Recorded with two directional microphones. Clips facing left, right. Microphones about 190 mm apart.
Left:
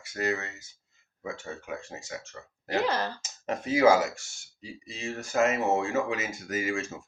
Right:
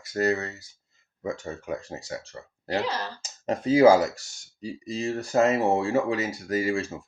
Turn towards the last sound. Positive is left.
turn(degrees=-35)  # may be behind; listen again after turning